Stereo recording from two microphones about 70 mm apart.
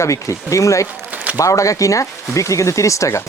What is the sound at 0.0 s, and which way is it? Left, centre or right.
Speech, left.